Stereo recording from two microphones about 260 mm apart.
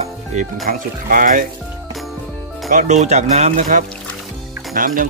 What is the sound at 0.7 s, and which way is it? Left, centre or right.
Speech, right.